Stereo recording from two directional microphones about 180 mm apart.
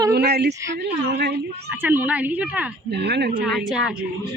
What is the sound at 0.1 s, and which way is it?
A woman's voice, 60° right (ahead or behind).